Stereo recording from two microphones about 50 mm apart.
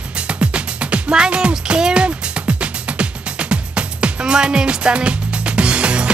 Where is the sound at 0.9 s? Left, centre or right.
Centre.